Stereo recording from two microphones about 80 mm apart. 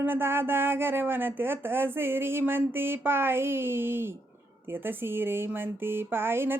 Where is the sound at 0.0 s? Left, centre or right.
Right.